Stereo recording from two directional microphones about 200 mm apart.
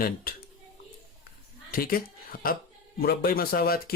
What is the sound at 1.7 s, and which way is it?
Speech, 45° left (ahead or behind).